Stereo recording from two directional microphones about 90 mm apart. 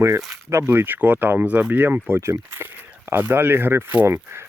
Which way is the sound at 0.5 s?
25° right (ahead or behind).